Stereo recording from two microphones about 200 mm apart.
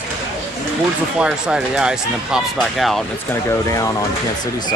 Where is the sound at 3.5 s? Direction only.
15° left (ahead or behind).